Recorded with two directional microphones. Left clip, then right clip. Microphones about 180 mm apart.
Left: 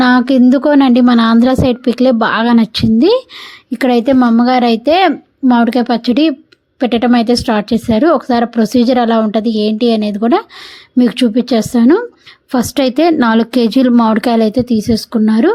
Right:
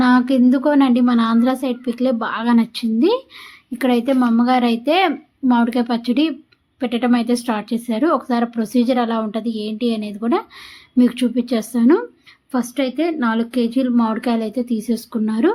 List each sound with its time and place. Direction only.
0.0 s a woman's voice: 40° left (ahead or behind)
12.5 s a woman's voice: 55° left (ahead or behind)